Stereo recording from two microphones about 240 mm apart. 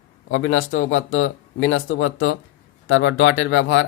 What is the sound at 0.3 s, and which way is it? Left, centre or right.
Speech, left.